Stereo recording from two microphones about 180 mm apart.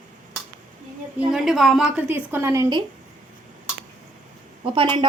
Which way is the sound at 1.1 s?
5° right (ahead or behind).